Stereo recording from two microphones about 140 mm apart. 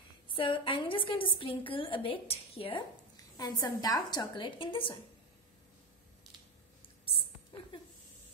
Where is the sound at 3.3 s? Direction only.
25° left (ahead or behind).